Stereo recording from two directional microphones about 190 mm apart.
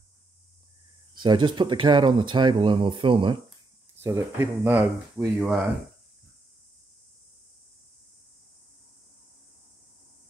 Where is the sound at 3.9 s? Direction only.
10° right (ahead or behind).